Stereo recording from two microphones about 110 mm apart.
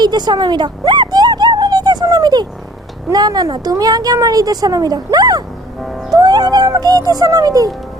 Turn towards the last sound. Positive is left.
turn(degrees=-35)  # may be behind; listen again after turning